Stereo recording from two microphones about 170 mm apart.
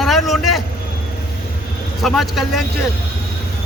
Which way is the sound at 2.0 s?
Centre (ahead or behind).